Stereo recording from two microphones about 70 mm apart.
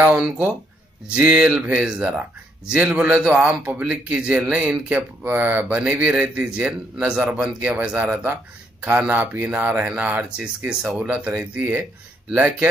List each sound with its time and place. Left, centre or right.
0.0 s speech: centre